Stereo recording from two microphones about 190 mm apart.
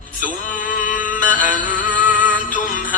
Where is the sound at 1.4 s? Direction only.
45° left (ahead or behind).